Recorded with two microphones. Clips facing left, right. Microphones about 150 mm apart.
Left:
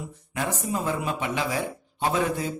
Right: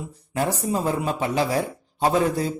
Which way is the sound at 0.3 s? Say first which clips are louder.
Right 4 dB; 35° right (ahead or behind).